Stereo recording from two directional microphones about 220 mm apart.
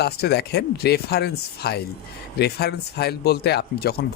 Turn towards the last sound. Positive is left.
turn(degrees=45)  # may be behind; listen again after turning